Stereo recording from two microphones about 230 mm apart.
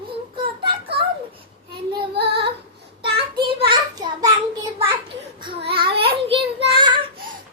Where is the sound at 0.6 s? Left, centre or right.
Right.